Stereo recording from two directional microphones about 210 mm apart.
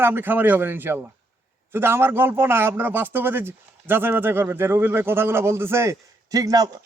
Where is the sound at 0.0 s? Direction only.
10° right (ahead or behind).